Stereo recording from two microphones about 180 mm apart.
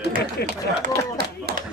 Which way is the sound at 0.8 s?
55° right (ahead or behind).